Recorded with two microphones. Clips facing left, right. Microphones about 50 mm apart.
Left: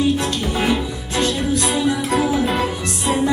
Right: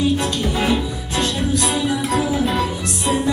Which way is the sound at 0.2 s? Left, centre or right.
Centre.